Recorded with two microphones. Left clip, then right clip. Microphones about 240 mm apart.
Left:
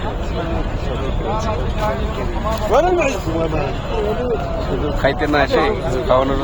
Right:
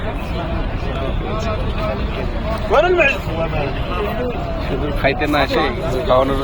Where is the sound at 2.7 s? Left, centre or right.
Left.